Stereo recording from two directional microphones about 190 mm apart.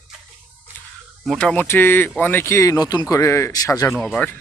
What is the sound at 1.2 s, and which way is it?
Speech, centre (ahead or behind).